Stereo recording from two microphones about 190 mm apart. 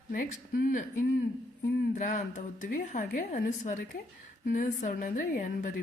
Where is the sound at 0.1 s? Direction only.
45° left (ahead or behind).